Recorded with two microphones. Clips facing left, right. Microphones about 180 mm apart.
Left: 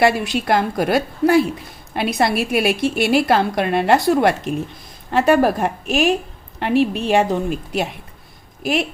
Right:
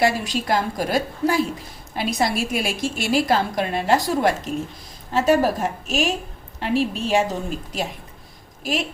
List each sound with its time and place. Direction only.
0.0 s a woman's voice: 65° left (ahead or behind)